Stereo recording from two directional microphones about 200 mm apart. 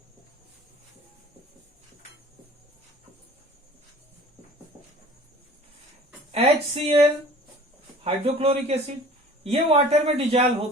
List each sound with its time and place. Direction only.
6.3 s a man's voice: 30° right (ahead or behind)